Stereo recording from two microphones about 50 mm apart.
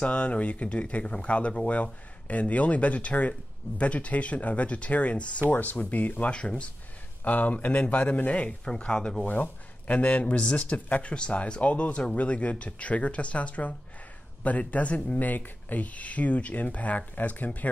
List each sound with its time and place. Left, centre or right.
0.0 s speech: left
9.2 s speech: left